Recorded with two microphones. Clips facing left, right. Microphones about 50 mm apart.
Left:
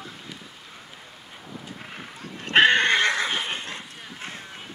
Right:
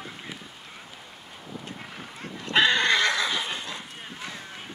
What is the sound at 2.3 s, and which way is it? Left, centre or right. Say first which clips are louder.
Neigh: left 4 dB; left.